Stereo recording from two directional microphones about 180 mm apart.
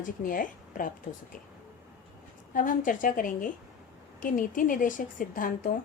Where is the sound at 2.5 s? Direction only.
50° left (ahead or behind).